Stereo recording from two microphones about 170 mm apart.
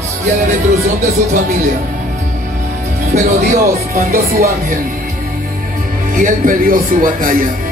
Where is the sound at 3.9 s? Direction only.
60° right (ahead or behind).